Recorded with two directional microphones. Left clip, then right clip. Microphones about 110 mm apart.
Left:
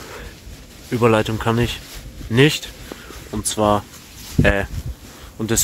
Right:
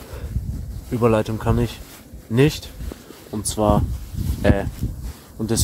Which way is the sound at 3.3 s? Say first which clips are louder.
Left 2 dB; 15° right (ahead or behind).